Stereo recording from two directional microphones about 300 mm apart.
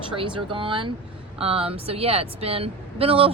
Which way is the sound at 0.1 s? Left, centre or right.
Centre.